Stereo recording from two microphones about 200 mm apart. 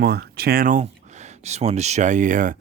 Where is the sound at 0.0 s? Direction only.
50° right (ahead or behind).